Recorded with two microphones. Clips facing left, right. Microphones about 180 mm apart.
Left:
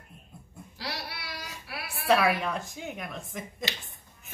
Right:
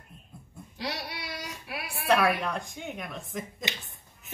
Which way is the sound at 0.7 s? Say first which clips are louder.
Right 3 dB; 20° right (ahead or behind).